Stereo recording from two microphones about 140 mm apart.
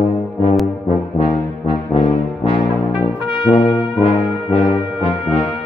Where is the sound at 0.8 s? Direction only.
40° left (ahead or behind).